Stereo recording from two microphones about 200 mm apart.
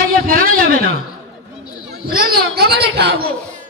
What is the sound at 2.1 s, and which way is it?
Speech, 50° right (ahead or behind).